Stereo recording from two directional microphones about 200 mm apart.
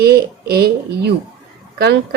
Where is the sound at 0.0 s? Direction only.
50° right (ahead or behind).